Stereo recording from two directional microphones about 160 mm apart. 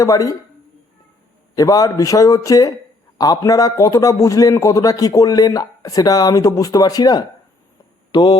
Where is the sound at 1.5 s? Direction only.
20° left (ahead or behind).